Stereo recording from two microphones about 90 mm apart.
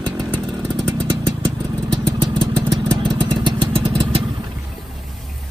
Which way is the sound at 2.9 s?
55° right (ahead or behind).